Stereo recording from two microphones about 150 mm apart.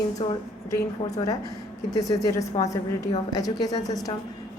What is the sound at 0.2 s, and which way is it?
Speech, 35° left (ahead or behind).